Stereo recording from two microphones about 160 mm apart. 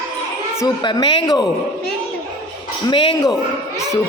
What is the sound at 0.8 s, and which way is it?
Speech, 30° left (ahead or behind).